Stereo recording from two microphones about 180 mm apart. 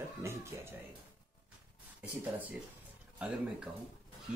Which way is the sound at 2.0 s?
10° right (ahead or behind).